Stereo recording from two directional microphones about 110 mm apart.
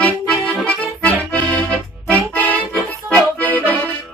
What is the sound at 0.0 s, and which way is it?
Accordion, 10° left (ahead or behind).